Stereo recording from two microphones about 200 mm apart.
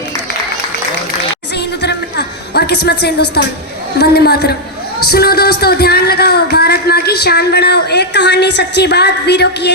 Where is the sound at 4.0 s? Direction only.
50° left (ahead or behind).